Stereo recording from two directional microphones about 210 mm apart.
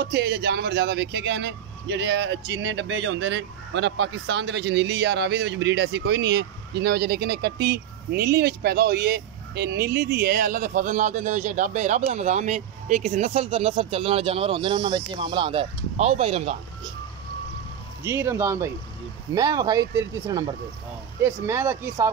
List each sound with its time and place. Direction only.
0.0 s speech: 50° right (ahead or behind); by 16.5 s 30° right (ahead or behind)
18.0 s speech: 10° right (ahead or behind)